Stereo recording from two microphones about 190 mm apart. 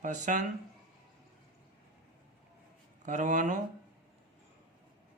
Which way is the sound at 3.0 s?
40° right (ahead or behind).